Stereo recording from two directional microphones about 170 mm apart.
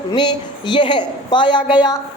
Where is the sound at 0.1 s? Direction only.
25° left (ahead or behind).